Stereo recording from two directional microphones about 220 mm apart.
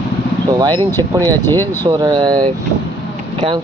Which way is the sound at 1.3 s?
10° left (ahead or behind).